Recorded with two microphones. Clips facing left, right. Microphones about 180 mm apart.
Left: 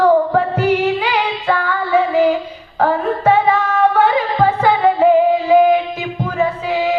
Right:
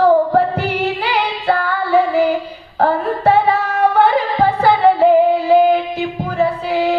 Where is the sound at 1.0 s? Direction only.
40° right (ahead or behind).